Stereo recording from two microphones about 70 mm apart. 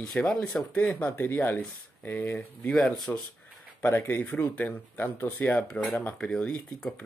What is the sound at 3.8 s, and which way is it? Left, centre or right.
Speech, left.